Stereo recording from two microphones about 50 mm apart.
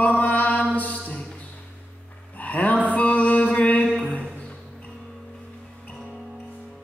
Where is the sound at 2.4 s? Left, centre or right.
Left.